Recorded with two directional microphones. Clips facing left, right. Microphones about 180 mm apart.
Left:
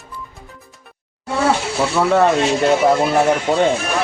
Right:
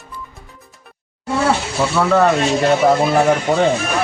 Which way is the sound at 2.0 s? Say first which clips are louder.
Even; 10° left (ahead or behind).